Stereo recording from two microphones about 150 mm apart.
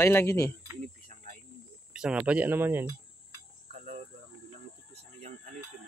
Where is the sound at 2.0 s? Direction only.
5° right (ahead or behind).